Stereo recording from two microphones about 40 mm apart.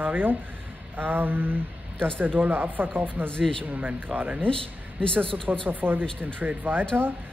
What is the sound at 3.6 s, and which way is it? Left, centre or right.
Speech, right.